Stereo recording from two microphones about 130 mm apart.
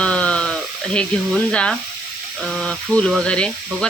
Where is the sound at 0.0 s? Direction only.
10° left (ahead or behind).